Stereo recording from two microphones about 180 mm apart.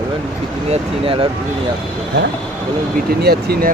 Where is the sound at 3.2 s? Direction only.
60° right (ahead or behind).